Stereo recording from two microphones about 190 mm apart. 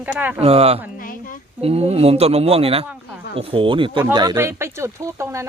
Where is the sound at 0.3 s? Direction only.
30° right (ahead or behind).